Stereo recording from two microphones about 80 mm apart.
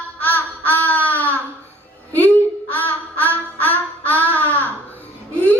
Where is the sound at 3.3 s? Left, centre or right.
Left.